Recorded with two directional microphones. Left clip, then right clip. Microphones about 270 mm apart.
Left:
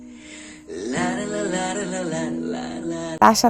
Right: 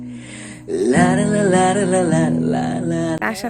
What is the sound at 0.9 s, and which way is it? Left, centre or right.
Music, right.